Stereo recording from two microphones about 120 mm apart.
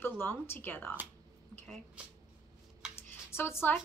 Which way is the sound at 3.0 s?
20° left (ahead or behind).